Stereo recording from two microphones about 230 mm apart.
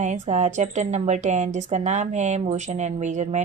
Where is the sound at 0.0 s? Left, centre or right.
Right.